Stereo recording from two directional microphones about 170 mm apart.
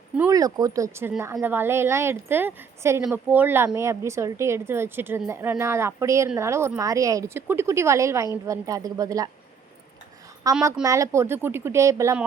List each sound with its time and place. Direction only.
0.3 s a woman's voice: 20° right (ahead or behind)
10.5 s a woman's voice: 20° right (ahead or behind)